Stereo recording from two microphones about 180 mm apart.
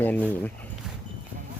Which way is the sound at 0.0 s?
10° left (ahead or behind).